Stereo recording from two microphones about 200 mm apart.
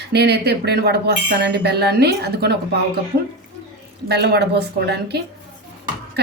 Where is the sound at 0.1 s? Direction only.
55° right (ahead or behind).